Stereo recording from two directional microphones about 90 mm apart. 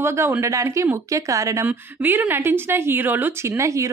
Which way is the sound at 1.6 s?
20° right (ahead or behind).